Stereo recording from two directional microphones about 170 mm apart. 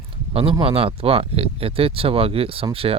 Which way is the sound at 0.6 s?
35° right (ahead or behind).